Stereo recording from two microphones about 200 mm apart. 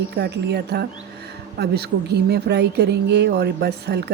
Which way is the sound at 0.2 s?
55° right (ahead or behind).